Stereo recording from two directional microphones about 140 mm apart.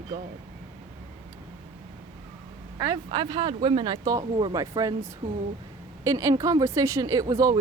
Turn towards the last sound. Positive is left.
turn(degrees=-25)  # may be behind; listen again after turning